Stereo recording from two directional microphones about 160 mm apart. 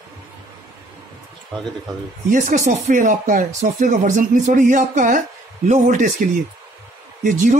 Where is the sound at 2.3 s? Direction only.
50° right (ahead or behind).